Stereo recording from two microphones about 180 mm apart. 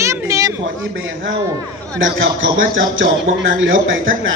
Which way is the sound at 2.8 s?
90° right.